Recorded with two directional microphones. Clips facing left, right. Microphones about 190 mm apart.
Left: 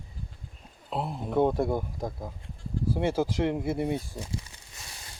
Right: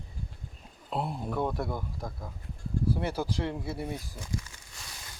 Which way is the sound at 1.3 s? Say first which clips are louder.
Left 10 dB; 25° left (ahead or behind).